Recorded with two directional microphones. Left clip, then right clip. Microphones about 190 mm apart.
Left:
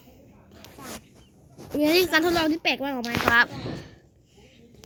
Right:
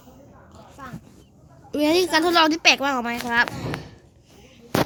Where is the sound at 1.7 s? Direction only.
5° right (ahead or behind).